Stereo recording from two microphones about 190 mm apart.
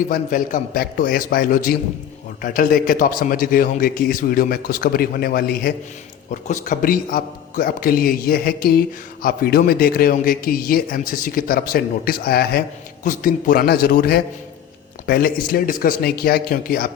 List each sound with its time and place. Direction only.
0.1 s a man's voice: 45° left (ahead or behind)